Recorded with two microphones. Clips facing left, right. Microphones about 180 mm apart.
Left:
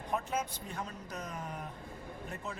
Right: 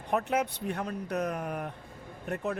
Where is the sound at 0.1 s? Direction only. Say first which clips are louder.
Right 7 dB; 65° right (ahead or behind).